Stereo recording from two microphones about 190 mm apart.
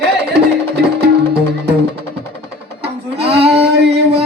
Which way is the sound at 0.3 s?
60° right (ahead or behind).